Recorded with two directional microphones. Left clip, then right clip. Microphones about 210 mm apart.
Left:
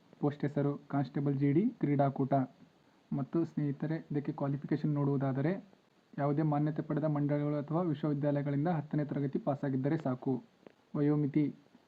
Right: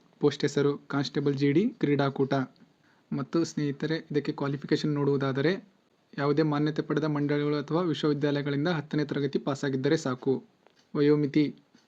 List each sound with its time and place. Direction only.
0.2 s a man's voice: 10° right (ahead or behind)